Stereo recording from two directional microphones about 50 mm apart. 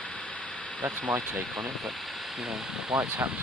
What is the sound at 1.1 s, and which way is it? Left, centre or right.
Speech, centre.